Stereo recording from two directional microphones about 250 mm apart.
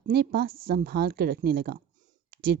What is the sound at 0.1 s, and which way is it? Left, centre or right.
Speech, right.